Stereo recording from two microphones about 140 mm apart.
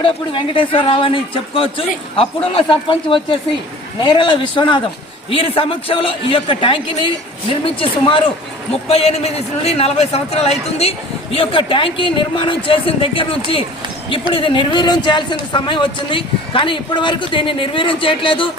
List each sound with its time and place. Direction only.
0.0 s a man's voice: 40° left (ahead or behind)